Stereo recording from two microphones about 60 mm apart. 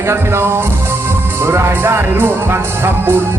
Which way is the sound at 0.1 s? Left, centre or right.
Right.